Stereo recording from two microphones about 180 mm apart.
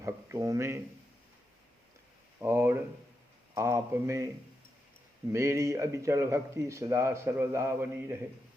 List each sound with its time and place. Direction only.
0.0 s speech: 15° right (ahead or behind)
2.4 s a sound: 15° right (ahead or behind)
3.5 s speech: 15° right (ahead or behind)
5.3 s speech: 15° right (ahead or behind)